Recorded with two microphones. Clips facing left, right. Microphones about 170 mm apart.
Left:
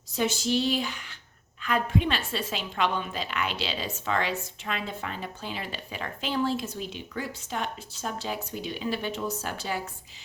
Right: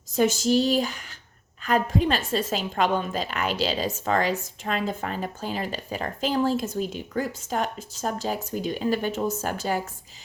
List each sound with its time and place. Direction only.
0.1 s a woman's voice: 45° right (ahead or behind)